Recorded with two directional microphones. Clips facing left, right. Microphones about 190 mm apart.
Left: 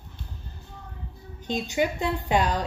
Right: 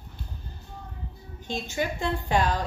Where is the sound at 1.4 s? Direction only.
20° left (ahead or behind).